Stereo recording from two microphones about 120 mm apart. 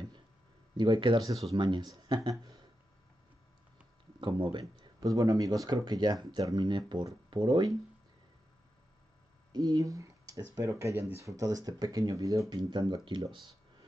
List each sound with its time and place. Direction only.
0.7 s speech: 40° right (ahead or behind)
4.2 s speech: 40° right (ahead or behind)
9.5 s speech: 35° right (ahead or behind)